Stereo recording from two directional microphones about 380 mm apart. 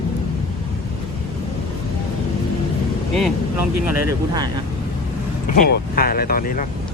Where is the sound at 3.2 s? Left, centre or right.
Centre.